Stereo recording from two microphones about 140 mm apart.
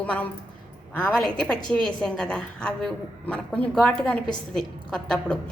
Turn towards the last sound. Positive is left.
turn(degrees=5)  # may be behind; listen again after turning